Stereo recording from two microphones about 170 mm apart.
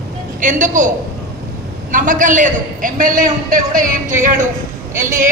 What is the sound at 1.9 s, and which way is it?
A man's voice, 50° right (ahead or behind).